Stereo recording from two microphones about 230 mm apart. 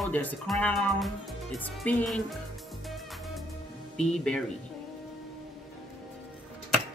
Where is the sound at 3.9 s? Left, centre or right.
Centre.